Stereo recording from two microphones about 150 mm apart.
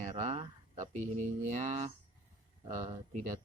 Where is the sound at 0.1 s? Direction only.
45° right (ahead or behind).